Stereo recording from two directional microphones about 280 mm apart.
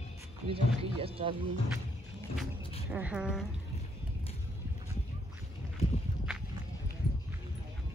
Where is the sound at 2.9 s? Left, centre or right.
Centre.